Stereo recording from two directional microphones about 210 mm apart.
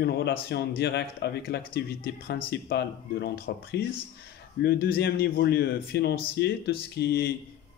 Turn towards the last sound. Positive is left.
turn(degrees=50)  # may be behind; listen again after turning